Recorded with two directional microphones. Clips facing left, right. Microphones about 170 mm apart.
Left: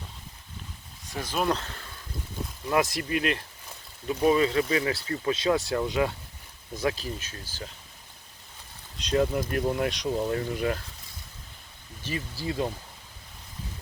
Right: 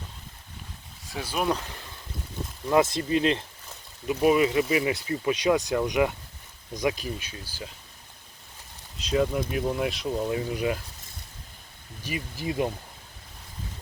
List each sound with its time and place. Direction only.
1.1 s speech: 10° right (ahead or behind)
2.6 s speech: 25° right (ahead or behind)
4.1 s speech: 15° right (ahead or behind)
9.0 s speech: centre (ahead or behind)
12.0 s speech: 15° right (ahead or behind)